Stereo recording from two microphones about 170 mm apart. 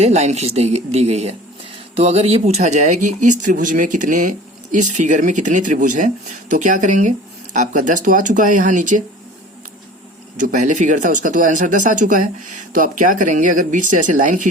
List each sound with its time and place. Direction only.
0.0 s speech: 40° right (ahead or behind)
10.3 s speech: 50° right (ahead or behind)